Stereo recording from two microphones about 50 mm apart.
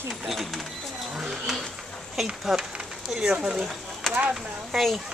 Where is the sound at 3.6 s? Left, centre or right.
Centre.